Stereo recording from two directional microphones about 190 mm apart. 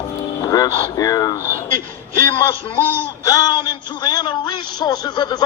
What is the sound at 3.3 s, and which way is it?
A man's voice, 20° left (ahead or behind).